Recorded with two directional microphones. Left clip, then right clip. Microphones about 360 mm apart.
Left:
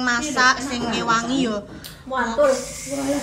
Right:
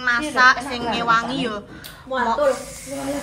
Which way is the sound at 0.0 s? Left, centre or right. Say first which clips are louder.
Right 3 dB; centre.